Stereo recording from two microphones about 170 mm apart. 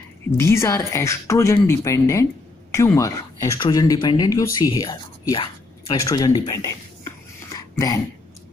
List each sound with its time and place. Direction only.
0.4 s speech: 15° left (ahead or behind)